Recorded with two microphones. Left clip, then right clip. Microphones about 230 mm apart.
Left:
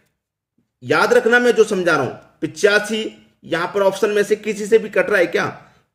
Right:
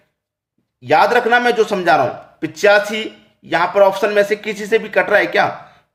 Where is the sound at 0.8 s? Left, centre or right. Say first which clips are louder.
Right 2 dB; centre.